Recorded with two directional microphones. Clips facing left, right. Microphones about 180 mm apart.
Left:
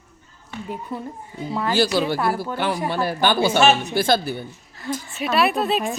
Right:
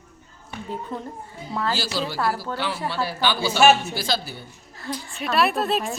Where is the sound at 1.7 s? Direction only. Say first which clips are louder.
Left 7 dB; 60° left (ahead or behind).